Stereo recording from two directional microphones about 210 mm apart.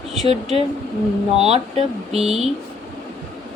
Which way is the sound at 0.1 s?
30° right (ahead or behind).